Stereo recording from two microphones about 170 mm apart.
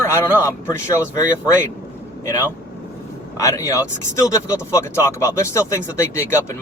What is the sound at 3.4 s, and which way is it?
Speech, 20° left (ahead or behind).